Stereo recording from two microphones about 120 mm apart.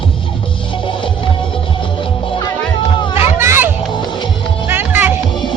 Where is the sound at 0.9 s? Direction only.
45° left (ahead or behind).